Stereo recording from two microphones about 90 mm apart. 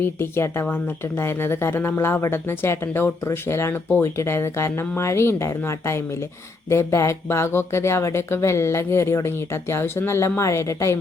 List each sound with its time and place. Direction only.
0.0 s speech: 30° left (ahead or behind)